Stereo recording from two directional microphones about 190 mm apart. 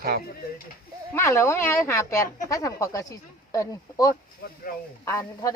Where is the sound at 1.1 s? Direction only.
15° left (ahead or behind).